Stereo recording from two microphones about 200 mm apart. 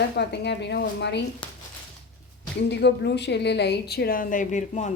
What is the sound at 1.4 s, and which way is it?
Speech, 25° left (ahead or behind).